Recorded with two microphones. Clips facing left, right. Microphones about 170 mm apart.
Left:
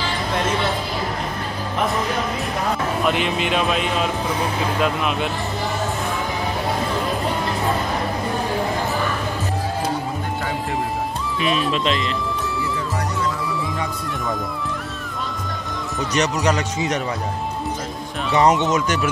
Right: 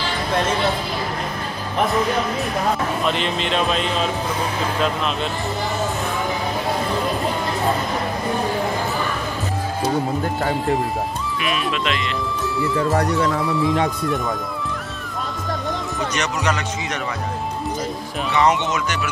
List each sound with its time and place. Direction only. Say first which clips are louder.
3.1 s speech: left 3 dB; 10° left (ahead or behind)
11.4 s a man's voice: left 3 dB; 30° left (ahead or behind)
16.2 s a man's voice: left 5 dB; 40° left (ahead or behind)
18.3 s a man's voice: left 2 dB; 40° left (ahead or behind)